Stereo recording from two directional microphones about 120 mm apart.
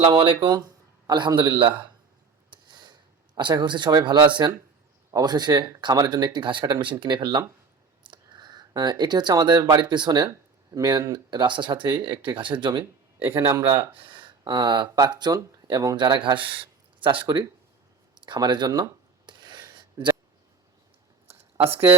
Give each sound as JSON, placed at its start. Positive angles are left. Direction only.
{"t": 0.1, "sound": "speech", "side_deg": -40}
{"t": 2.5, "sound": "a sound", "side_deg": -40}
{"t": 5.1, "sound": "speech", "side_deg": -35}
{"t": 13.1, "sound": "a man's voice", "side_deg": -20}
{"t": 13.9, "sound": "speech", "side_deg": -45}
{"t": 18.1, "sound": "a sound", "side_deg": -35}
{"t": 21.7, "sound": "a man's voice", "side_deg": -20}